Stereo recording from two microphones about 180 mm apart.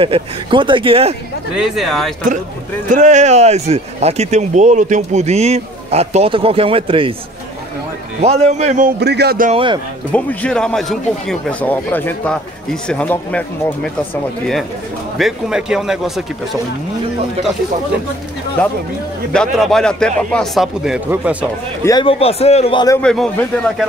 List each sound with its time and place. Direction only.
0.0 s speech: 30° right (ahead or behind)
1.5 s speech: 5° right (ahead or behind)
2.9 s speech: 40° right (ahead or behind)
8.2 s speech: 35° right (ahead or behind)
9.0 s speech: 65° right (ahead or behind)
9.5 s speech: 30° right (ahead or behind)
10.1 s speech: 5° left (ahead or behind)
15.1 s speech: centre (ahead or behind)
19.3 s speech: 5° left (ahead or behind)
22.0 s a man's voice: 35° left (ahead or behind)
23.0 s speech: 5° left (ahead or behind)